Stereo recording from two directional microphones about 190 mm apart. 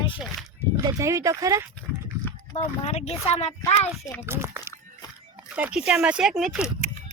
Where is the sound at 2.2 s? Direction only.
10° left (ahead or behind).